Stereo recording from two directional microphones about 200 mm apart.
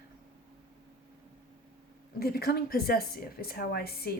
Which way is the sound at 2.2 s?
50° left (ahead or behind).